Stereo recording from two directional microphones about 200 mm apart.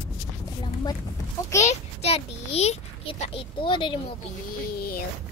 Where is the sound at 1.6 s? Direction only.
30° left (ahead or behind).